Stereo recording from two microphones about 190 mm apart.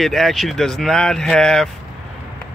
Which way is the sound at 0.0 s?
Centre (ahead or behind).